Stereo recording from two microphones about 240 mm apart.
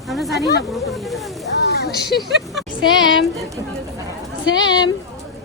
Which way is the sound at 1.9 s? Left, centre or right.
Left.